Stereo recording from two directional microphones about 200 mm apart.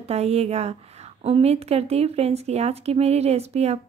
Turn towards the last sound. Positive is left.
turn(degrees=-30)  # may be behind; listen again after turning